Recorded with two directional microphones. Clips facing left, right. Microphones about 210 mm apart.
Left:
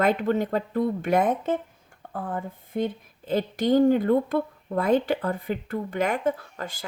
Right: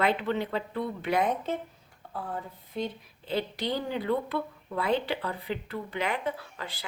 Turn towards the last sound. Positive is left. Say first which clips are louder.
# left 4 dB
turn(degrees=45)  # may be behind; listen again after turning